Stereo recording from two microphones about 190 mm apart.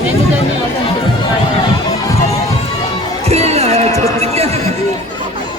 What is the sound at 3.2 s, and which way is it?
Music, 35° right (ahead or behind).